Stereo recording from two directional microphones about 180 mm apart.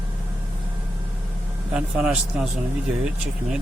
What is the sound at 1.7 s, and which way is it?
Speech, 5° right (ahead or behind).